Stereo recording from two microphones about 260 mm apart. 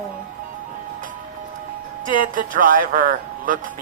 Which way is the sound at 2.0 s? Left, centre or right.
Right.